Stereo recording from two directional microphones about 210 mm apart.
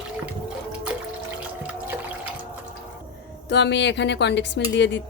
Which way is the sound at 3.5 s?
55° left (ahead or behind).